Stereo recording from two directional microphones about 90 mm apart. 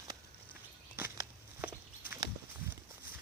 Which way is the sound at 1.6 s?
20° right (ahead or behind).